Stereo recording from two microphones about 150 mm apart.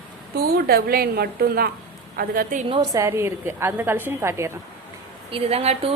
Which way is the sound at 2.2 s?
75° right (ahead or behind).